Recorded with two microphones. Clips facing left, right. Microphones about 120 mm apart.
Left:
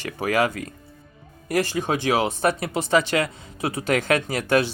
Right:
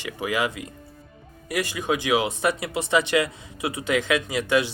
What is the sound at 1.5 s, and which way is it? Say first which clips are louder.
Speech: left 3 dB; 35° left (ahead or behind).